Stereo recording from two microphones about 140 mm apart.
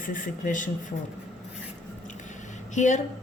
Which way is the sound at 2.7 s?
60° left (ahead or behind).